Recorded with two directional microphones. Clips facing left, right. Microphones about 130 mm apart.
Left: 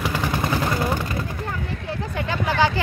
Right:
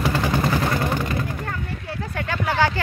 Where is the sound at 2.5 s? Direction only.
20° left (ahead or behind).